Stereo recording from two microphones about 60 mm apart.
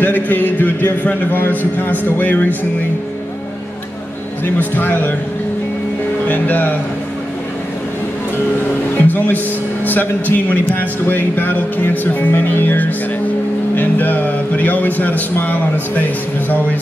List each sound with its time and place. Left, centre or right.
0.0 s a man's voice: left
4.6 s speech: left
6.2 s speech: left
9.0 s speech: left